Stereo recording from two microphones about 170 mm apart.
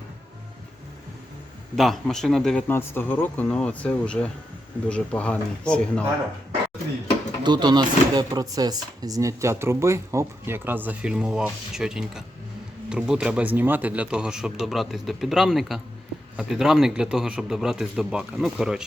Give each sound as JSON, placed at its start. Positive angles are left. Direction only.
{"t": 1.7, "sound": "speech", "side_deg": 0}
{"t": 7.4, "sound": "speech", "side_deg": -25}